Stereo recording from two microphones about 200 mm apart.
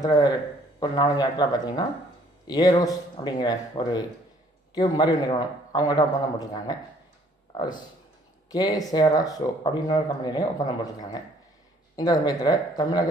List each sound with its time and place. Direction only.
0.0 s speech: 20° left (ahead or behind)